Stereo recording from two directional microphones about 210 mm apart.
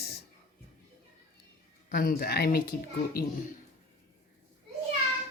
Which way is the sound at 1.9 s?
45° left (ahead or behind).